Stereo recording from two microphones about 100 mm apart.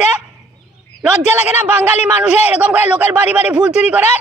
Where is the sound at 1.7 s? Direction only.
15° right (ahead or behind).